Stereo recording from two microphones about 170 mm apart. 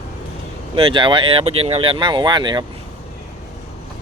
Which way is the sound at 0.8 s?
30° right (ahead or behind).